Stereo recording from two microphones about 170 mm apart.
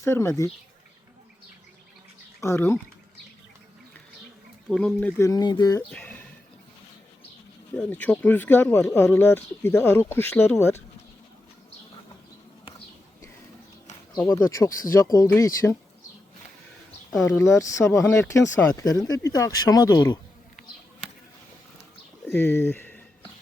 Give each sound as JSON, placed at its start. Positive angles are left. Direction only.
{"t": 0.0, "sound": "speech", "side_deg": 15}
{"t": 2.4, "sound": "speech", "side_deg": 15}
{"t": 4.7, "sound": "speech", "side_deg": 5}
{"t": 5.9, "sound": "speech", "side_deg": 10}
{"t": 7.8, "sound": "speech", "side_deg": 10}
{"t": 14.2, "sound": "speech", "side_deg": 15}
{"t": 17.2, "sound": "speech", "side_deg": 15}
{"t": 22.3, "sound": "a sound", "side_deg": 15}